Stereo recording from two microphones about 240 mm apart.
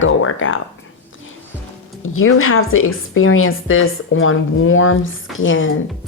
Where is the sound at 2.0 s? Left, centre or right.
Left.